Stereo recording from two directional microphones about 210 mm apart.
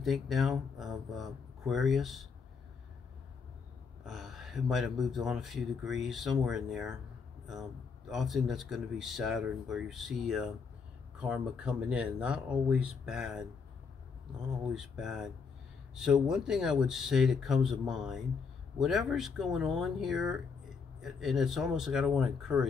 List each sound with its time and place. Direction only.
0.0 s speech: centre (ahead or behind)
4.0 s speech: centre (ahead or behind)
8.1 s speech: centre (ahead or behind)
14.7 s speech: centre (ahead or behind)